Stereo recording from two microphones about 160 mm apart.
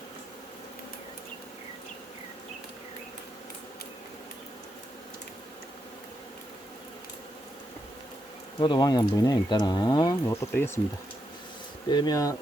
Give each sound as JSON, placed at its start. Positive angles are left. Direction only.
{"t": 8.5, "sound": "speech", "side_deg": 25}
{"t": 11.9, "sound": "speech", "side_deg": 25}